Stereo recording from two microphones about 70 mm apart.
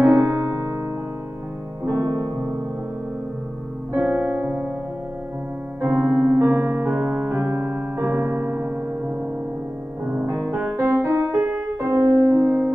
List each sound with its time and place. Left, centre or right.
0.1 s piano: right
3.9 s music: right
5.8 s piano: right
6.6 s piano: right
7.0 s piano: centre
7.2 s piano: right
10.2 s music: right
11.3 s music: right
12.0 s music: right